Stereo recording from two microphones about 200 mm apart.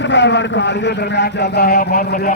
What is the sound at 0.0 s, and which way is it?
A man's voice, 60° left (ahead or behind).